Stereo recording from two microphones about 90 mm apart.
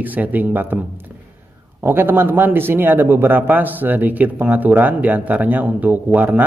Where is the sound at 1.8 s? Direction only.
25° right (ahead or behind).